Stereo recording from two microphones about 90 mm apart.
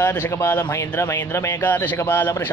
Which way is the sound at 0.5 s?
25° left (ahead or behind).